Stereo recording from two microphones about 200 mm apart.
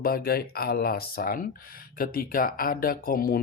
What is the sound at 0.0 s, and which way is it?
Speech, 50° left (ahead or behind).